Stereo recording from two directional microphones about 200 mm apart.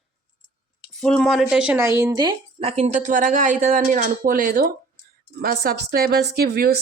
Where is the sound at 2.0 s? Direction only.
20° right (ahead or behind).